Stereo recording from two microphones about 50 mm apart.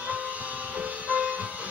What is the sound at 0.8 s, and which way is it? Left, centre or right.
Music, right.